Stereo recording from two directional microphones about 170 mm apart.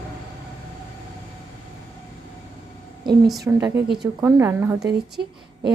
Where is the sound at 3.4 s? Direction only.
15° right (ahead or behind).